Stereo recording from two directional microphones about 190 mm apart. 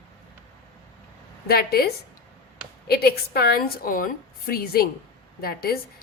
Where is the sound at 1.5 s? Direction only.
55° left (ahead or behind).